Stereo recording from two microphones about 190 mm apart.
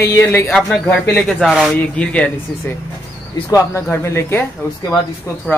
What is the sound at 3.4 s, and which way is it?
Speech, 15° left (ahead or behind).